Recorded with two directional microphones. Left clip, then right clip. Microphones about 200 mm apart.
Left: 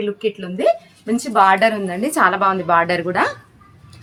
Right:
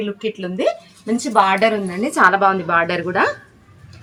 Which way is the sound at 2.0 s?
40° left (ahead or behind).